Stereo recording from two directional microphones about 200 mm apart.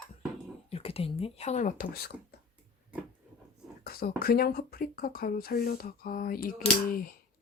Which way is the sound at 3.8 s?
50° left (ahead or behind).